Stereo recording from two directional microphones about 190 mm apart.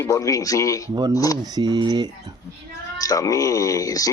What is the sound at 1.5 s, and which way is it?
Speech, 20° right (ahead or behind).